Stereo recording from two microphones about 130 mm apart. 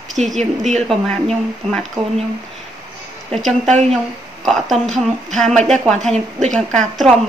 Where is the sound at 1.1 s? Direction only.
5° left (ahead or behind).